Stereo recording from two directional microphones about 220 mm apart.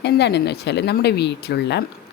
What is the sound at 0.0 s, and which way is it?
Speech, 50° left (ahead or behind).